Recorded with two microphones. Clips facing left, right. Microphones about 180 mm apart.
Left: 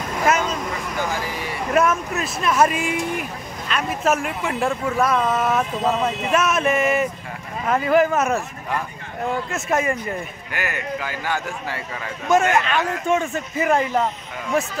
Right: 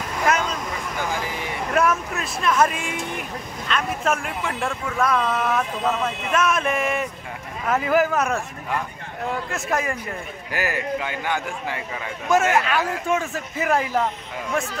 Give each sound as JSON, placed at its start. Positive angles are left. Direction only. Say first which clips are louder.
{"t": 0.3, "sound": "vehicle", "louder": "left 2 dB", "side_deg": 5}
{"t": 1.7, "sound": "speech", "louder": "left 2 dB", "side_deg": 0}
{"t": 5.5, "sound": "speech", "louder": "left 2 dB", "side_deg": 20}
{"t": 9.5, "sound": "speech", "louder": "left 4 dB", "side_deg": 0}
{"t": 10.5, "sound": "speech", "louder": "right 3 dB", "side_deg": -35}
{"t": 11.0, "sound": "a man's voice", "louder": "even", "side_deg": -20}
{"t": 12.3, "sound": "speech", "louder": "left 1 dB", "side_deg": -5}